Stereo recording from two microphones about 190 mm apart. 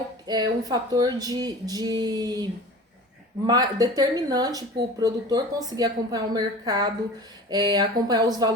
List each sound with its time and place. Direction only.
0.3 s speech: 20° right (ahead or behind)